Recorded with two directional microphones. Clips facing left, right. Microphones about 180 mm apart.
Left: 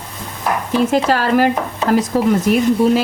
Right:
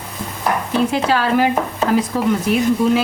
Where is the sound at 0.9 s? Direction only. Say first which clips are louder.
Left 2 dB; 45° left (ahead or behind).